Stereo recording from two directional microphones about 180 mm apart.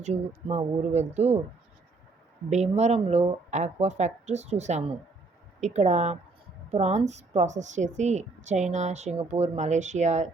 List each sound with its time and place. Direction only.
0.0 s speech: 35° right (ahead or behind)
2.5 s speech: 40° right (ahead or behind)